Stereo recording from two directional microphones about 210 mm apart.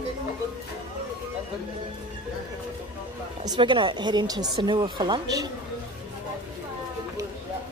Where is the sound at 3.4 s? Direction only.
20° right (ahead or behind).